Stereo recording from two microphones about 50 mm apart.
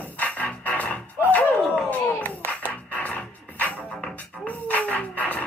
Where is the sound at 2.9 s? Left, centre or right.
Left.